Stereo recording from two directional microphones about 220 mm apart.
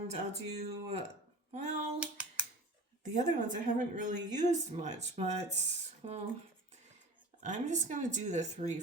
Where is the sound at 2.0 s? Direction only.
5° right (ahead or behind).